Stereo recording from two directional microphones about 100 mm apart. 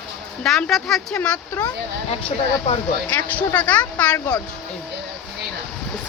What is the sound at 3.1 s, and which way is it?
Speech, 15° left (ahead or behind).